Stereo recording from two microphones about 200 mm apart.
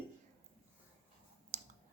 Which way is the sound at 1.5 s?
35° right (ahead or behind).